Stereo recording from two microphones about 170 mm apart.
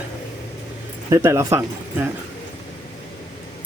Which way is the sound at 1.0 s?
15° right (ahead or behind).